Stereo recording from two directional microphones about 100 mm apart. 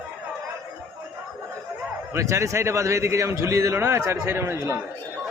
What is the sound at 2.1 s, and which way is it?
A man's voice, 30° right (ahead or behind).